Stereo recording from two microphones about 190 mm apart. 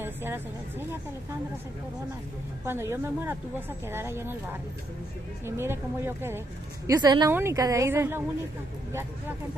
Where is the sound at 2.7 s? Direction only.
15° right (ahead or behind).